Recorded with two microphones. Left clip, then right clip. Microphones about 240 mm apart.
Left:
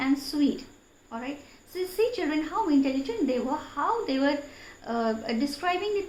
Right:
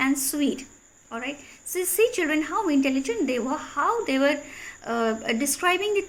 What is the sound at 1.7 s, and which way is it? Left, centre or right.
A woman's voice, right.